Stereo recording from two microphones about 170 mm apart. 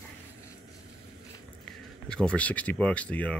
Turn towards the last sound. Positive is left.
turn(degrees=10)  # may be behind; listen again after turning